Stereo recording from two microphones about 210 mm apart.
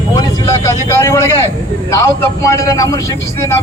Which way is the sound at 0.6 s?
15° left (ahead or behind).